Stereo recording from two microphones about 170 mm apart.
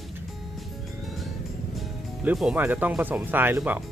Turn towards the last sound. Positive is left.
turn(degrees=-10)  # may be behind; listen again after turning